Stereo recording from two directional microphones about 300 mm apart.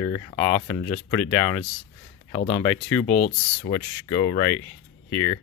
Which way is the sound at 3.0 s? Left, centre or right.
Left.